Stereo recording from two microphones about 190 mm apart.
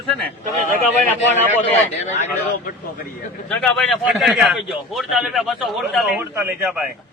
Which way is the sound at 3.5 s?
5° left (ahead or behind).